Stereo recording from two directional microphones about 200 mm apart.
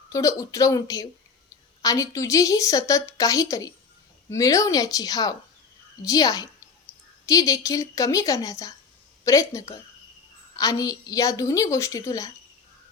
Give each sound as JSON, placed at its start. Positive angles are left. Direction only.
{"t": 0.1, "sound": "a woman's voice", "side_deg": 15}